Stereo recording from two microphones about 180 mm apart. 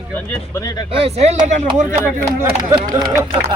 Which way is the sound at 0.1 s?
15° left (ahead or behind).